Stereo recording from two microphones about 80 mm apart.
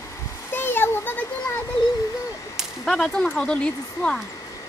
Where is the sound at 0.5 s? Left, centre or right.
Left.